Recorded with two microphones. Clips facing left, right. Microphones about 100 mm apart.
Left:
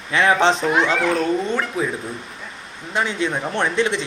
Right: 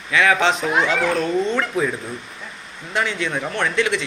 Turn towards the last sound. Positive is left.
turn(degrees=20)  # may be behind; listen again after turning